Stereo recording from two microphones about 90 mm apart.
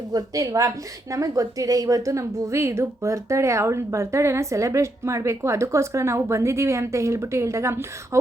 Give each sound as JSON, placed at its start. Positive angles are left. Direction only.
{"t": 0.1, "sound": "a woman's voice", "side_deg": -45}